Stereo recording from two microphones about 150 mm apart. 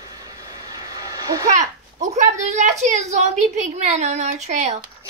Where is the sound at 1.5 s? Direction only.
55° right (ahead or behind).